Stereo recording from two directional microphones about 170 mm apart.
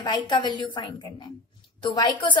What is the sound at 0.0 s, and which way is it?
A woman's voice, 25° left (ahead or behind).